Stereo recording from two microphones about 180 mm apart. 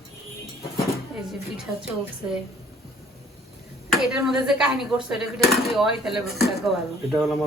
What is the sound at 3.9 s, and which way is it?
Speech, centre (ahead or behind).